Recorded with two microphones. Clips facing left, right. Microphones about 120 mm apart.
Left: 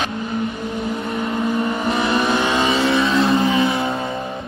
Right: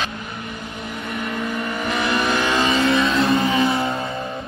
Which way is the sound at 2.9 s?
25° left (ahead or behind).